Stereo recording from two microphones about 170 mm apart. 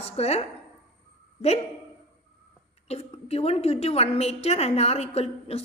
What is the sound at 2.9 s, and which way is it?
A woman's voice, 35° left (ahead or behind).